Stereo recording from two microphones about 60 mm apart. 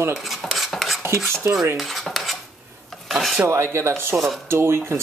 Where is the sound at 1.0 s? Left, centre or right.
Right.